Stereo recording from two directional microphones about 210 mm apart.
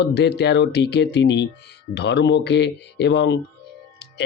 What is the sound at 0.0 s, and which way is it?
Speech, 55° left (ahead or behind).